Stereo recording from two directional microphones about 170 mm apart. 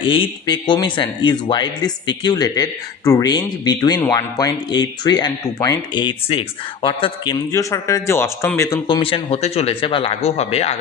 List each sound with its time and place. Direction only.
0.0 s speech: 30° left (ahead or behind)
7.5 s a man's voice: 20° left (ahead or behind)
8.9 s speech: 30° left (ahead or behind)